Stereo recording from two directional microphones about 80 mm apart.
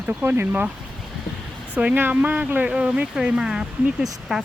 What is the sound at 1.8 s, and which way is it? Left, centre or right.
Speech, right.